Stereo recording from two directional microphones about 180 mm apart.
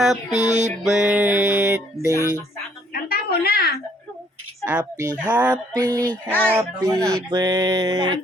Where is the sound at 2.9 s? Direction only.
60° left (ahead or behind).